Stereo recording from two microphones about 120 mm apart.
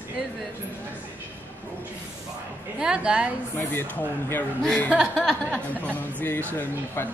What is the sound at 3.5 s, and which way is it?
Speech, 15° left (ahead or behind).